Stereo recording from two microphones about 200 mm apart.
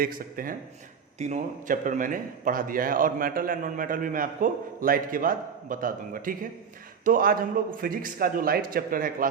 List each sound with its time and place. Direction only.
0.0 s a man's voice: 45° right (ahead or behind)